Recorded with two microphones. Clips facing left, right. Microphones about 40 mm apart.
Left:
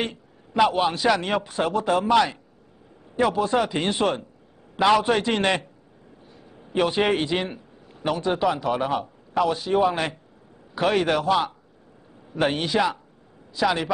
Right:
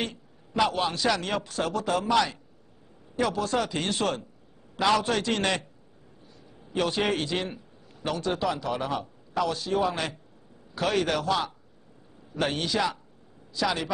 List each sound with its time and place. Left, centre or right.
0.6 s a man's voice: centre